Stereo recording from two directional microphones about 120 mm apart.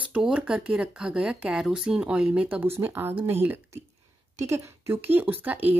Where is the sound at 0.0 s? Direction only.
10° right (ahead or behind).